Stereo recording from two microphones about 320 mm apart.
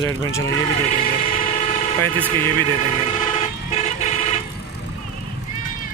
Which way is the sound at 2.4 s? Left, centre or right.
Right.